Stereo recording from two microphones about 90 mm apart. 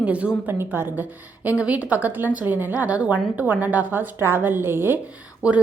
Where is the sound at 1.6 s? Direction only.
15° right (ahead or behind).